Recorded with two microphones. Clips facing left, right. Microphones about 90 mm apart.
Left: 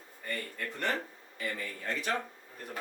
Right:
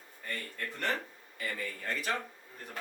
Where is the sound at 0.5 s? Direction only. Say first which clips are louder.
Even; 5° left (ahead or behind).